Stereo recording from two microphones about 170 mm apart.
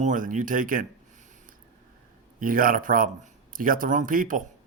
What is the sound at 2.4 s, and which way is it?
Speech, 55° right (ahead or behind).